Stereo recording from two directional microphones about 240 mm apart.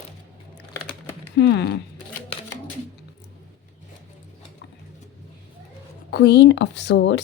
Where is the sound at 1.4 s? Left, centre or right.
Left.